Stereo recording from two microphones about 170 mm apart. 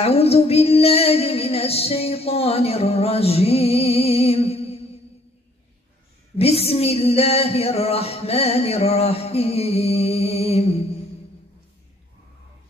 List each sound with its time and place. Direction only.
0.0 s female singing: 35° left (ahead or behind)
6.3 s female singing: 35° left (ahead or behind)